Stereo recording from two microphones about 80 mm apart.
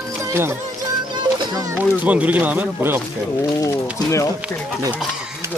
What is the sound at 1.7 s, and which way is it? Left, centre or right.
Speech, centre.